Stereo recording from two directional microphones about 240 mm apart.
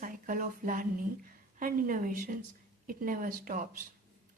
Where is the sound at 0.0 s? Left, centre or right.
Right.